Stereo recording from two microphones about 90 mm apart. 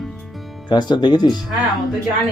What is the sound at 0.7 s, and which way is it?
Speech, 55° left (ahead or behind).